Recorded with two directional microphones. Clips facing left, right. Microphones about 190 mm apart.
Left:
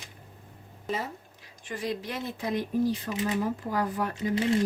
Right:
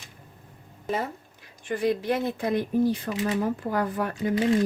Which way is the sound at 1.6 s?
55° right (ahead or behind).